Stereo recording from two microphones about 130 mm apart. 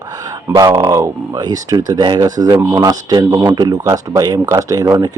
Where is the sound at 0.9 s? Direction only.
25° right (ahead or behind).